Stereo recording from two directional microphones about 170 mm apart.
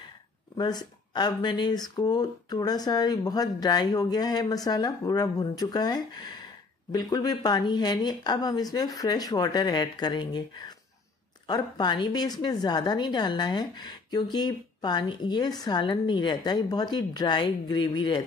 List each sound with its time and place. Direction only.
0.6 s a woman's voice: 25° left (ahead or behind)